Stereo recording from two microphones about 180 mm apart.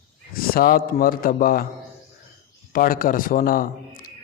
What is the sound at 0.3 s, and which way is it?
A man's voice, 55° left (ahead or behind).